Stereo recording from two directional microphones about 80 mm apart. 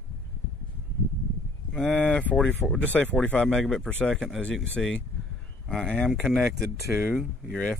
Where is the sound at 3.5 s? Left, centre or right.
Centre.